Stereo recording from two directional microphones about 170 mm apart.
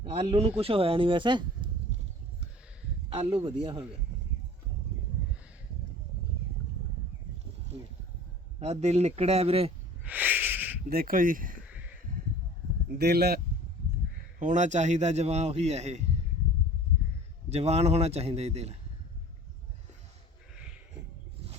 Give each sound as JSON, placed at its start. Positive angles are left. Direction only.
{"t": 0.0, "sound": "speech", "side_deg": -35}
{"t": 3.1, "sound": "speech", "side_deg": -35}
{"t": 8.5, "sound": "speech", "side_deg": -40}
{"t": 10.1, "sound": "a sound", "side_deg": -10}
{"t": 10.8, "sound": "speech", "side_deg": -55}
{"t": 11.7, "sound": "a sound", "side_deg": -10}
{"t": 13.0, "sound": "speech", "side_deg": -75}
{"t": 14.3, "sound": "speech", "side_deg": -45}
{"t": 17.5, "sound": "speech", "side_deg": -40}